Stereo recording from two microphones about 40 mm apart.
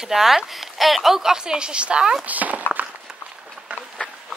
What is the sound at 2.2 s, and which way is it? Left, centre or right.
Speech, right.